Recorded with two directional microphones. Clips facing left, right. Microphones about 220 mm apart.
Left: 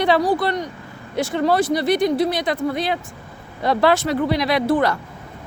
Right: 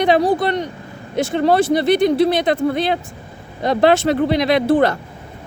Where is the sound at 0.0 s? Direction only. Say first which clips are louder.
Right 3 dB; 20° right (ahead or behind).